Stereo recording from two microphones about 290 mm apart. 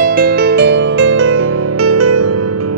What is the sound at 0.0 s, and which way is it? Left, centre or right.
Music, right.